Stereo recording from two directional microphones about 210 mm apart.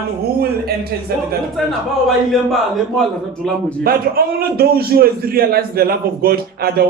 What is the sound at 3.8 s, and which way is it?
A man's voice, 45° right (ahead or behind).